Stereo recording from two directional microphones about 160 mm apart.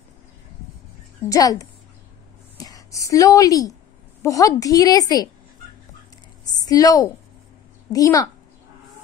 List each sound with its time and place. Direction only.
1.3 s a woman's voice: 20° left (ahead or behind)
6.5 s a woman's voice: 25° left (ahead or behind)